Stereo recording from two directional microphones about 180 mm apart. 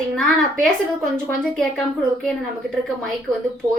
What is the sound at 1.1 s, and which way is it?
Speech, 5° left (ahead or behind).